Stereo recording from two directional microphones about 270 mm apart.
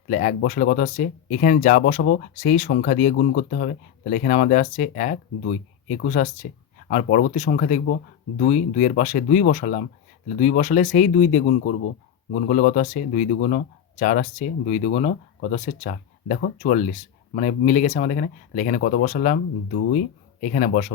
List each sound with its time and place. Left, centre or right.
0.1 s speech: left
20.4 s speech: left